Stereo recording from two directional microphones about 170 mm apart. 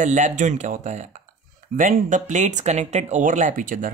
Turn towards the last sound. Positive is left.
turn(degrees=-50)  # may be behind; listen again after turning